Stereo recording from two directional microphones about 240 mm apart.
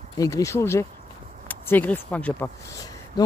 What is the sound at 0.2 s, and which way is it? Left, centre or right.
Speech, centre.